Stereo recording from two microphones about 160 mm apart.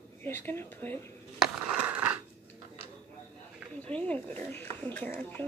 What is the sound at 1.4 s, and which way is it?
Mechanisms, 5° right (ahead or behind).